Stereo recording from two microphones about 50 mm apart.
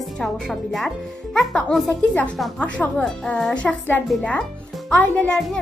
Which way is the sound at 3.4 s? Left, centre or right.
Centre.